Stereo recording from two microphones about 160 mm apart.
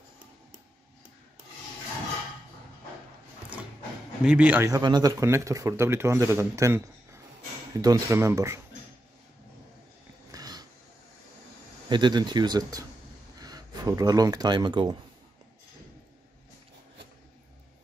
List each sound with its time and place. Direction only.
4.2 s speech: 5° right (ahead or behind)
4.6 s speech: 25° right (ahead or behind)
10.3 s a sound: 25° right (ahead or behind)
11.9 s speech: 25° right (ahead or behind)